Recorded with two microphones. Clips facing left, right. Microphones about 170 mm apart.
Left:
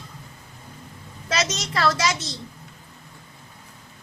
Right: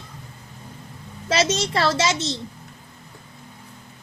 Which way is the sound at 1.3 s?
30° right (ahead or behind).